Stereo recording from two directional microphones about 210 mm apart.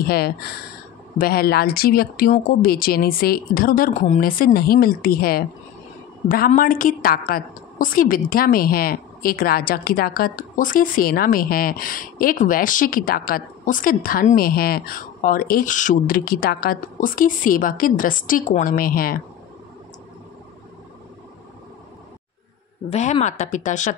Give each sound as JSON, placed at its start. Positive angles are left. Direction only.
{"t": 0.0, "sound": "a woman's voice", "side_deg": 50}
{"t": 22.8, "sound": "speech", "side_deg": 30}